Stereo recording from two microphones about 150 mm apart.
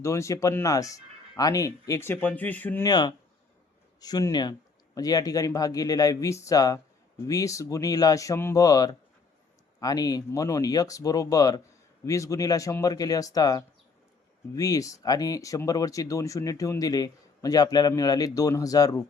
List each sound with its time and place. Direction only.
0.0 s speech: 20° left (ahead or behind)
2.8 s speech: 30° left (ahead or behind)